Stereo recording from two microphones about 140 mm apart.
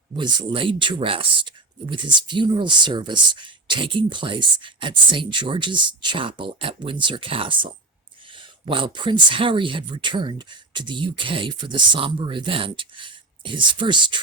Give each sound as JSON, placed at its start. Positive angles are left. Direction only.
{"t": 0.2, "sound": "speech", "side_deg": -30}